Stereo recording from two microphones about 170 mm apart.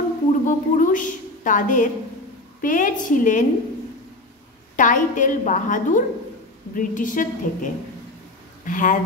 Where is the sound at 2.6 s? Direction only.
50° left (ahead or behind).